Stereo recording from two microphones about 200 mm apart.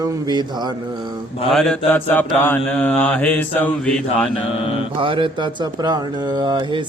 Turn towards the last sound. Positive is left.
turn(degrees=-25)  # may be behind; listen again after turning